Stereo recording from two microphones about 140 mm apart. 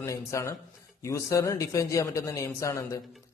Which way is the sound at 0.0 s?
20° left (ahead or behind).